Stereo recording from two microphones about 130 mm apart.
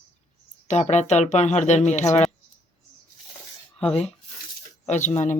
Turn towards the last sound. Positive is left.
turn(degrees=65)  # may be behind; listen again after turning